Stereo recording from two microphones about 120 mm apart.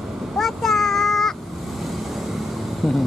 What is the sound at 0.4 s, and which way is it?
Child singing, centre (ahead or behind).